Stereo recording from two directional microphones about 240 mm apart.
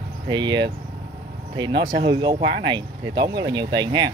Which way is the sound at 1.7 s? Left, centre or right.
Right.